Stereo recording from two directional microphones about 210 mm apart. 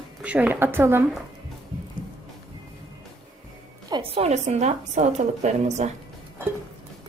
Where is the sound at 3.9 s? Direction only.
25° right (ahead or behind).